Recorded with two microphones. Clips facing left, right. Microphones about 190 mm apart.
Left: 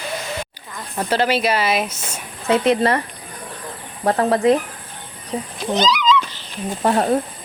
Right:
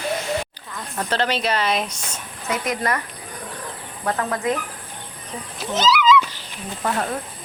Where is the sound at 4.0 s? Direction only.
35° left (ahead or behind).